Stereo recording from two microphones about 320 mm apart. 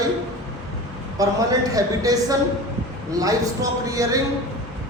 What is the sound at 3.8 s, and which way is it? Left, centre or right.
Speech, centre.